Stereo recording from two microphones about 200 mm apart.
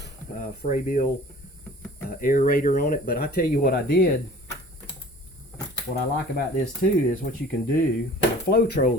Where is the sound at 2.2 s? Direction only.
45° left (ahead or behind).